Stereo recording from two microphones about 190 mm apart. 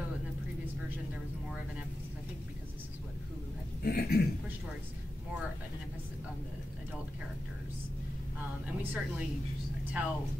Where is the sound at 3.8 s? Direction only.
55° left (ahead or behind).